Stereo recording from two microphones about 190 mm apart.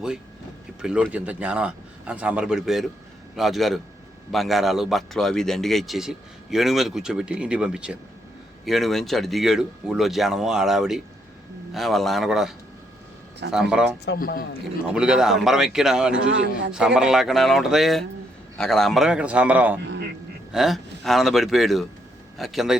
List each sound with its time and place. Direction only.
0.8 s a man's voice: 5° right (ahead or behind)
14.0 s a man's voice: 55° left (ahead or behind)
14.8 s a man's voice: 5° right (ahead or behind)
16.1 s a man's voice: 75° right (ahead or behind)
16.7 s a man's voice: 5° right (ahead or behind)